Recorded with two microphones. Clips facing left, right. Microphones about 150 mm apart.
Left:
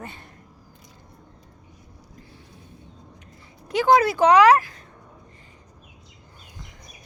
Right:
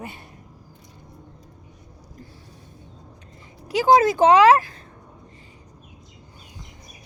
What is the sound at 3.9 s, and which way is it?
Speech, 25° right (ahead or behind).